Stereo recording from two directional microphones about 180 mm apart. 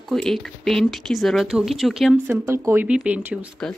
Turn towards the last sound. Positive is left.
turn(degrees=-5)  # may be behind; listen again after turning